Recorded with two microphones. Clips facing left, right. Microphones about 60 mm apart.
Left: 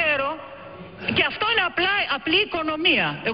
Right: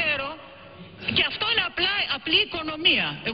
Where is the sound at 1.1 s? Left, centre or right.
Left.